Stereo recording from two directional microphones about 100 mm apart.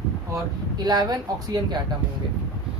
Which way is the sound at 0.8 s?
40° right (ahead or behind).